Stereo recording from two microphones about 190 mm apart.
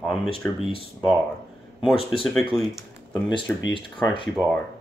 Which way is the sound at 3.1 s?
20° left (ahead or behind).